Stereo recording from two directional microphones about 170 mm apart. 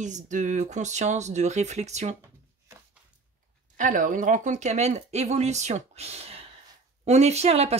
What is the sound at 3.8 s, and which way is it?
Speech, 50° right (ahead or behind).